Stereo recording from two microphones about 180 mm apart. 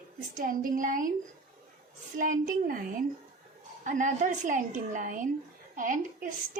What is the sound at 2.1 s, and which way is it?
Speech, 50° right (ahead or behind).